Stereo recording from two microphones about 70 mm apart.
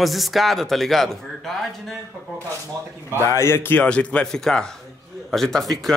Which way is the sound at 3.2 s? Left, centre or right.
Left.